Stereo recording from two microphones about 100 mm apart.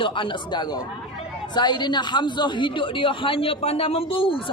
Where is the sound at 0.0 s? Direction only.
55° left (ahead or behind).